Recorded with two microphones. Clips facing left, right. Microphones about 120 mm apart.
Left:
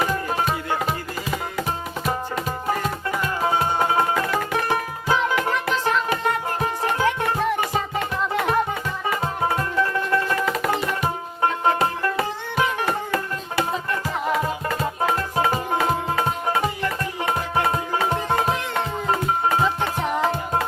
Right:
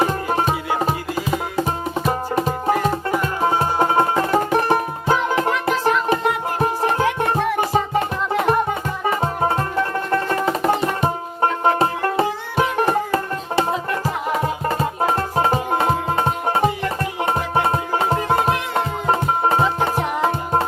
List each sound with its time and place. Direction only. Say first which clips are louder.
0.0 s music: right 4 dB; 35° right (ahead or behind)